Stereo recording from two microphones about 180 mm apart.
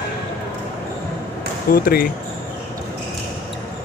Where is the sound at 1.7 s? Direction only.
55° left (ahead or behind).